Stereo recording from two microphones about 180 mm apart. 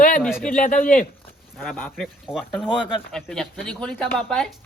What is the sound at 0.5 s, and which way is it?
Speech, 45° left (ahead or behind).